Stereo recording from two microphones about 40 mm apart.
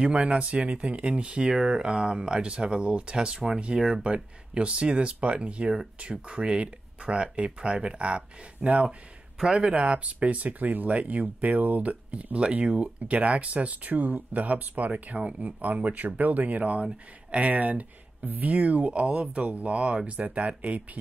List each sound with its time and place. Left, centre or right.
0.0 s speech: right